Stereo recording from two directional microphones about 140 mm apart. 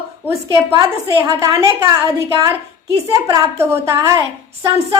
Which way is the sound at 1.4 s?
20° right (ahead or behind).